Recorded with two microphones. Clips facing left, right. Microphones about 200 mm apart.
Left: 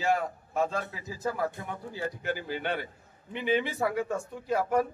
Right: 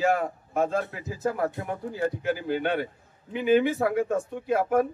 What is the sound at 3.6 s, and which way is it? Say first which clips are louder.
Speech: right 5 dB; 55° right (ahead or behind).